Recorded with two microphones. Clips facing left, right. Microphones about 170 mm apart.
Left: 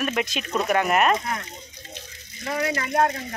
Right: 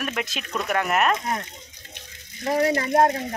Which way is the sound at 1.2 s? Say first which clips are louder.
Right 2 dB; 30° right (ahead or behind).